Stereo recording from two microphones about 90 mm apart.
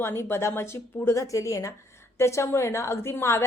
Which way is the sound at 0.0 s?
25° left (ahead or behind).